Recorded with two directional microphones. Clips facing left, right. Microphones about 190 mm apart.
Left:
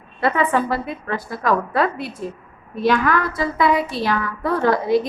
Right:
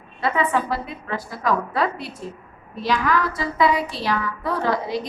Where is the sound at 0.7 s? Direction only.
55° left (ahead or behind).